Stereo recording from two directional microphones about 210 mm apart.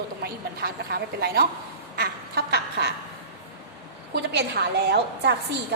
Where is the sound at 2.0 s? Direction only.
50° right (ahead or behind).